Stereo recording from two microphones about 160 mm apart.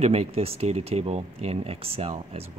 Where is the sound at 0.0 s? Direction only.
40° right (ahead or behind).